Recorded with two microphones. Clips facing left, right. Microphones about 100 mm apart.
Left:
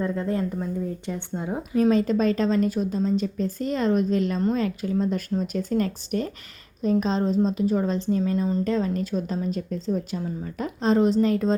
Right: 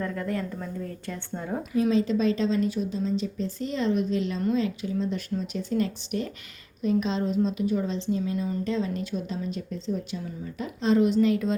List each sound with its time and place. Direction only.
0.0 s speech: 25° left (ahead or behind)
1.7 s a woman's voice: 50° left (ahead or behind)